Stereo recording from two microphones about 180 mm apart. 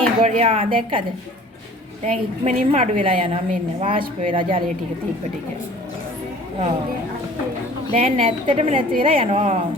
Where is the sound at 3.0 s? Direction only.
30° right (ahead or behind).